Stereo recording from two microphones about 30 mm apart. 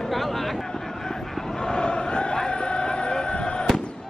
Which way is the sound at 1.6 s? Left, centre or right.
Left.